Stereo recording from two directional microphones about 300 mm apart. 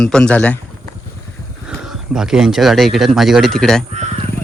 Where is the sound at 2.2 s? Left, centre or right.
Centre.